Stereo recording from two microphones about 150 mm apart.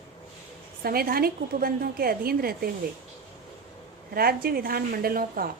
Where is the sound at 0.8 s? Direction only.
85° right.